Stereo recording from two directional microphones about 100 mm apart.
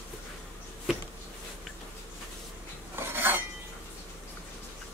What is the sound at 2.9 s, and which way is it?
Dishes, 20° right (ahead or behind).